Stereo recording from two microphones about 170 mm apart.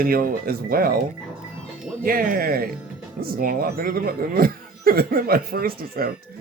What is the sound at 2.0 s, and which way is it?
Speech, 55° right (ahead or behind).